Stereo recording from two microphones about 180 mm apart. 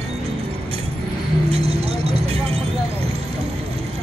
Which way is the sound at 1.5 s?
35° right (ahead or behind).